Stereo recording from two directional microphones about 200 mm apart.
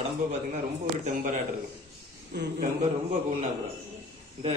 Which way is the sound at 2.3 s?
55° right (ahead or behind).